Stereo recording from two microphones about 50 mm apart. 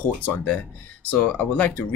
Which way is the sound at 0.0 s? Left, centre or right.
Left.